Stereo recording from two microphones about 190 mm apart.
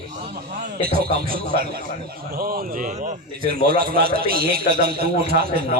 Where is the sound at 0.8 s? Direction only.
50° right (ahead or behind).